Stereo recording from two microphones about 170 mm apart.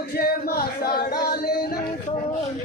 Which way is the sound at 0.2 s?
60° left (ahead or behind).